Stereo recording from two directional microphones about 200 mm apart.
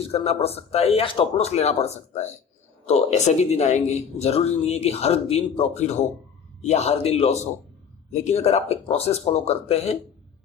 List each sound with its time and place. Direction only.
0.0 s speech: 30° left (ahead or behind)